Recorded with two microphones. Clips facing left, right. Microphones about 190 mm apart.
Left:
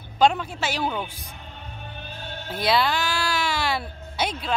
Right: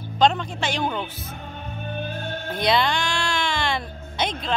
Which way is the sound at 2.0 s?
50° right (ahead or behind).